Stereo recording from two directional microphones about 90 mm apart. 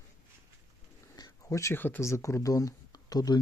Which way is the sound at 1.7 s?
20° left (ahead or behind).